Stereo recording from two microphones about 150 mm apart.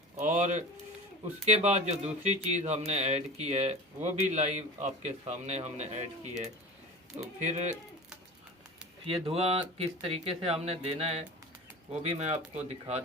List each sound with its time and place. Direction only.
0.2 s speech: 55° right (ahead or behind)
9.0 s speech: 40° right (ahead or behind)